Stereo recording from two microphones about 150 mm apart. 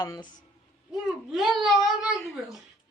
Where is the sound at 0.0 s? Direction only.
25° left (ahead or behind).